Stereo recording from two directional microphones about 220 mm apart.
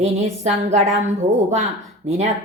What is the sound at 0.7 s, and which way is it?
Speech, 30° right (ahead or behind).